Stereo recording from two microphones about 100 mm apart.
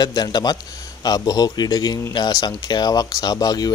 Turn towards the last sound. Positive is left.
turn(degrees=40)  # may be behind; listen again after turning